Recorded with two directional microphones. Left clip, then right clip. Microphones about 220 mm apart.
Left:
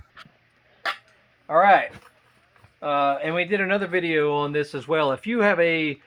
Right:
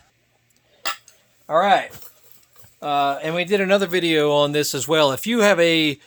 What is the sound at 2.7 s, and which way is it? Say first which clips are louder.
Speech: right 1 dB; 65° right (ahead or behind).